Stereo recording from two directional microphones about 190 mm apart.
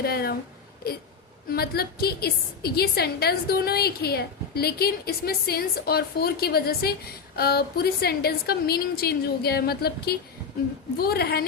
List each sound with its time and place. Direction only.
0.0 s speech: 55° left (ahead or behind)
1.5 s a woman's voice: 55° left (ahead or behind)